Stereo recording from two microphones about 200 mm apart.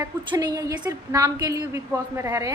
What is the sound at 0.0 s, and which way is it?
A woman's voice, 20° right (ahead or behind).